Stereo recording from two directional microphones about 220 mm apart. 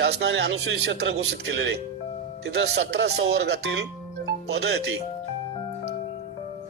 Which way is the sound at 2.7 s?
50° right (ahead or behind).